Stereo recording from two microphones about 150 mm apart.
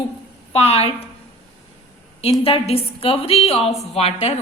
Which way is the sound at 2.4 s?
40° left (ahead or behind).